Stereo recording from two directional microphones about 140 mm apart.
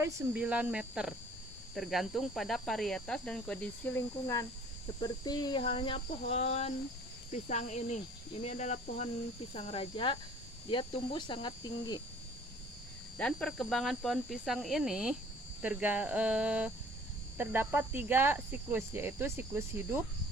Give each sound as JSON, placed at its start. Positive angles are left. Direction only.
{"t": 0.3, "sound": "speech", "side_deg": -10}
{"t": 4.9, "sound": "speech", "side_deg": 30}
{"t": 9.5, "sound": "speech", "side_deg": 45}
{"t": 13.1, "sound": "speech", "side_deg": 5}